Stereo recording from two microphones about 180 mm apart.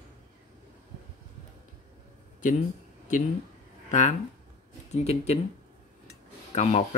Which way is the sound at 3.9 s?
40° left (ahead or behind).